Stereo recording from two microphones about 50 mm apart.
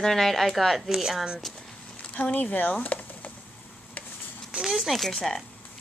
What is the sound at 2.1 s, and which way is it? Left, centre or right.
Speech, left.